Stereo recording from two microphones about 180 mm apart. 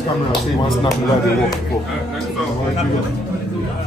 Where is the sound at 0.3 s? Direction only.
25° left (ahead or behind).